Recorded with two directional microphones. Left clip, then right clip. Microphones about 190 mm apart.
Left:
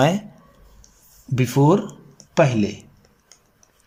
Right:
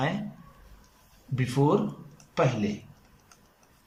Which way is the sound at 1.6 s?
75° left (ahead or behind).